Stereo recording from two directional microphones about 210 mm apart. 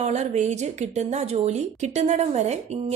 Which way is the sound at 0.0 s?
35° right (ahead or behind).